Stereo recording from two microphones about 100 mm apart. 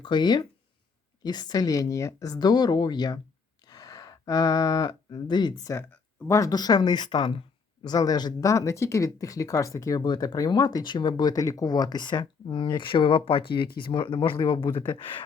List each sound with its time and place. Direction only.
0.0 s speech: 50° left (ahead or behind)
3.7 s cattle: 40° left (ahead or behind)
5.9 s a sound: 30° left (ahead or behind)
6.5 s speech: 45° left (ahead or behind)
7.9 s speech: 40° left (ahead or behind)
14.3 s speech: 35° left (ahead or behind)
14.8 s speech: 50° left (ahead or behind)